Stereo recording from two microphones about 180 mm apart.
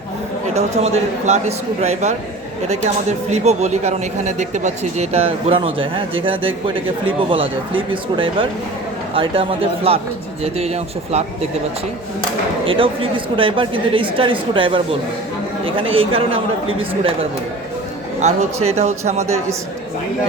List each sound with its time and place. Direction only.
0.5 s speech: 40° right (ahead or behind)
12.6 s speech: 30° right (ahead or behind)
18.2 s speech: 40° right (ahead or behind)